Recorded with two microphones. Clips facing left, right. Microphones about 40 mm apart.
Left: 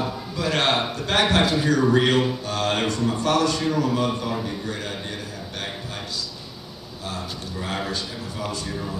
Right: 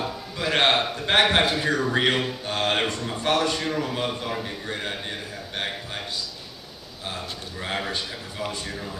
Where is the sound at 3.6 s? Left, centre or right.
Centre.